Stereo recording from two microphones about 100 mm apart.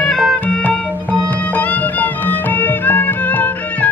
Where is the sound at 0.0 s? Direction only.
15° left (ahead or behind).